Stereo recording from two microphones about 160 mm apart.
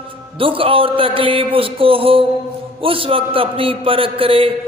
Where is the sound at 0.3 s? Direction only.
35° right (ahead or behind).